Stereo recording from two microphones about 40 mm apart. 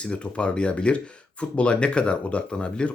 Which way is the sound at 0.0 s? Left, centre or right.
Left.